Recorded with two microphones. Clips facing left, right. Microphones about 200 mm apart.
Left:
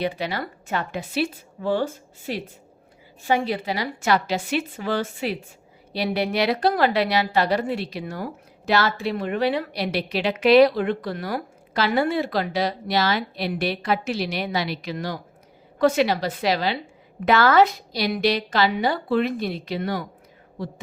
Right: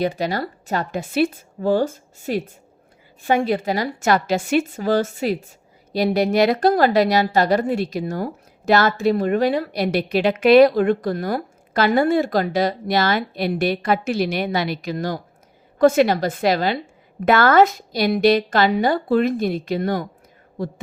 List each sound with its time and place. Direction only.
0.0 s a woman's voice: 45° right (ahead or behind)